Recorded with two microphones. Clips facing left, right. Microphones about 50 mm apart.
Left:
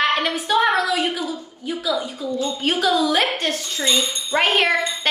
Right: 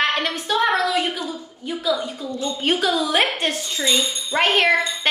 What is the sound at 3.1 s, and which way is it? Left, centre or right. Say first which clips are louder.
Speech: even; centre.